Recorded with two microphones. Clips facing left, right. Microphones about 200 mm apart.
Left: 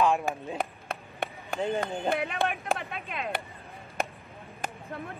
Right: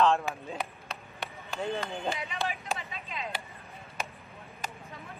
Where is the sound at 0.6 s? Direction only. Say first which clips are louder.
Left 4 dB; 55° left (ahead or behind).